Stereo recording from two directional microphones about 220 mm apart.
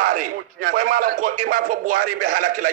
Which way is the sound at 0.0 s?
40° right (ahead or behind).